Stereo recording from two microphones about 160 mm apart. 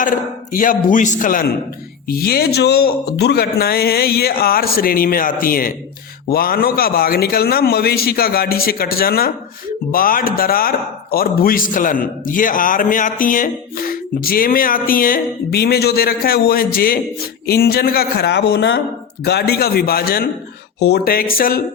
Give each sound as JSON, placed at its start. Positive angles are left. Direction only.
{"t": 0.5, "sound": "a man's voice", "side_deg": 60}
{"t": 2.0, "sound": "a man's voice", "side_deg": 70}
{"t": 20.7, "sound": "a man's voice", "side_deg": 90}